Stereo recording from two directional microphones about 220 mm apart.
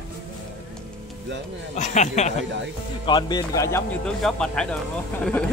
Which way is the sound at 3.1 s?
20° left (ahead or behind).